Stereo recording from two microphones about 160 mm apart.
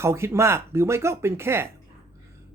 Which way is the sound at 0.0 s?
15° right (ahead or behind).